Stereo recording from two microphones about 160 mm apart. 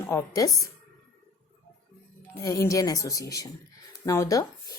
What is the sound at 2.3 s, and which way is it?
A woman's voice, 20° left (ahead or behind).